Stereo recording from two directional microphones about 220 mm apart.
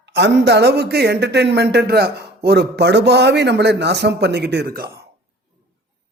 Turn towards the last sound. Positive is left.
turn(degrees=-45)  # may be behind; listen again after turning